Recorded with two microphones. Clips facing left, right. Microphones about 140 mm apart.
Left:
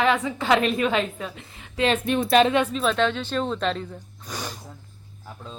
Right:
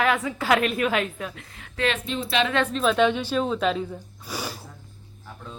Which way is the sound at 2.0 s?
55° left (ahead or behind).